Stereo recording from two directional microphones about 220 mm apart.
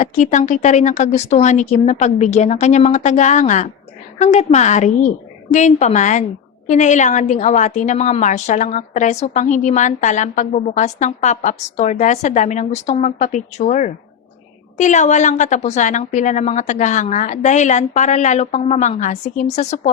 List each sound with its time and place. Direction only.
0.0 s a woman's voice: 35° left (ahead or behind)